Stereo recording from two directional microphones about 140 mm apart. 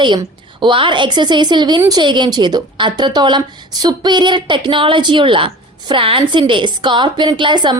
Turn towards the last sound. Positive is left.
turn(degrees=-35)  # may be behind; listen again after turning